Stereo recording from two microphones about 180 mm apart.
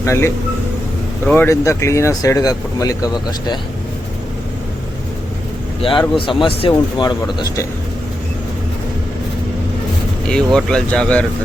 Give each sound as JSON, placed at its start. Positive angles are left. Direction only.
{"t": 0.0, "sound": "speech", "side_deg": 15}
{"t": 5.8, "sound": "speech", "side_deg": 30}
{"t": 10.2, "sound": "speech", "side_deg": 5}